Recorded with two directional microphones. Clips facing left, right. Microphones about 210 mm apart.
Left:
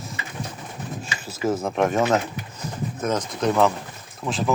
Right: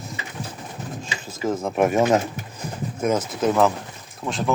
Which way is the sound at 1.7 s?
10° right (ahead or behind).